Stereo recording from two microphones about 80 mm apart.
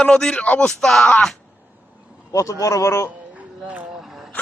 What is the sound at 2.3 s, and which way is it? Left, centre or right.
Speech, left.